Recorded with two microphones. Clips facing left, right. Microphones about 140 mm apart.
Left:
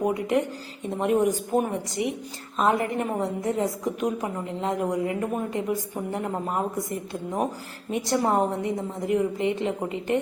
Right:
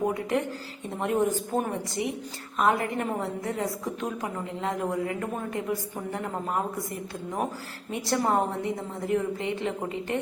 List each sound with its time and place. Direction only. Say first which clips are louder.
0.1 s a woman's voice: left 3 dB; 20° left (ahead or behind)